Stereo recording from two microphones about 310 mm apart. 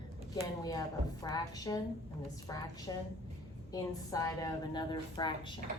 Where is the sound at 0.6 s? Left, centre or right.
Centre.